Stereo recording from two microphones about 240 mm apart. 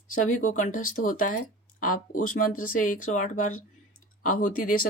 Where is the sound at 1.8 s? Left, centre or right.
Left.